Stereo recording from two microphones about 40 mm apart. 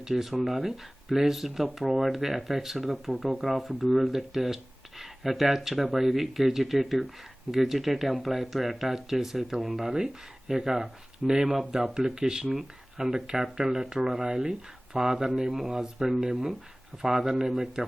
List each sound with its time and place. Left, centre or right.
0.0 s speech: centre